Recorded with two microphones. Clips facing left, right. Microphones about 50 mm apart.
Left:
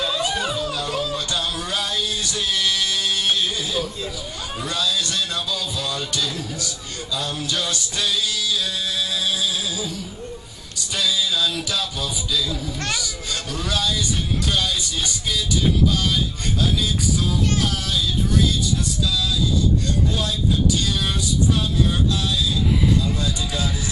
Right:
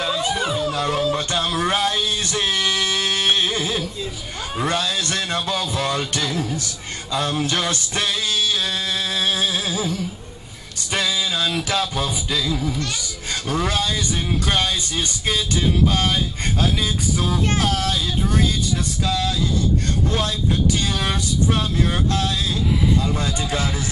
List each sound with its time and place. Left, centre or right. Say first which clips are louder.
0.1 s music: right 1 dB; right
0.6 s music: right 4 dB; right
12.7 s speech: even; left
13.3 s speech: right 5 dB; right